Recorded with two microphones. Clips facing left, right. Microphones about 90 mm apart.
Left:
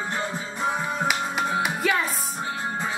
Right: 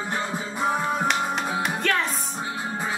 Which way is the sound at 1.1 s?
5° left (ahead or behind).